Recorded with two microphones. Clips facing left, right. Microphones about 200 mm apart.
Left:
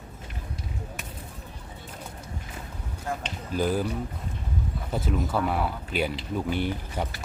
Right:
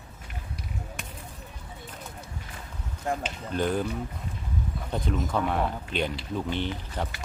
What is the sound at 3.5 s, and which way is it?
Speech, 5° left (ahead or behind).